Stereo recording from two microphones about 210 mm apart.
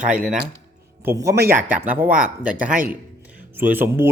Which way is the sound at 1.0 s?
10° right (ahead or behind).